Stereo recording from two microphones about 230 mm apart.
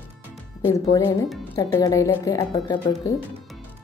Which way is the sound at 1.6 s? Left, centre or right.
Centre.